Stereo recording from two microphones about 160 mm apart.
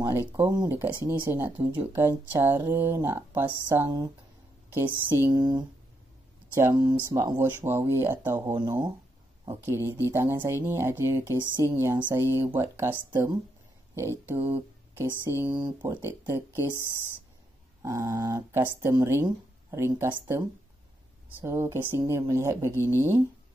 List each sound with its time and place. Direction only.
0.0 s speech: 20° right (ahead or behind)
3.6 s speech: 25° right (ahead or behind)
4.7 s speech: 15° right (ahead or behind)
5.3 s speech: 25° right (ahead or behind)
17.8 s speech: 20° right (ahead or behind)
21.4 s speech: 15° right (ahead or behind)